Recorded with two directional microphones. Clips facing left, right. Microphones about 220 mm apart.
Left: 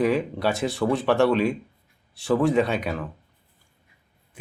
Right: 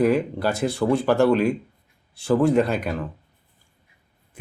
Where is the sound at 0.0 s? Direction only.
Centre (ahead or behind).